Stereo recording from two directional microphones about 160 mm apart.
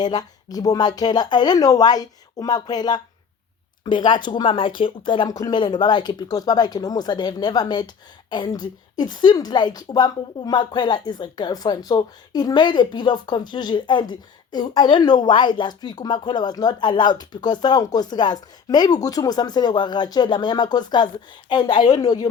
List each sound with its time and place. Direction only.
0.0 s a woman's voice: 25° left (ahead or behind)